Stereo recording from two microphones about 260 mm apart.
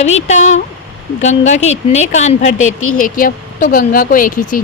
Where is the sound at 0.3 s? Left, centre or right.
Left.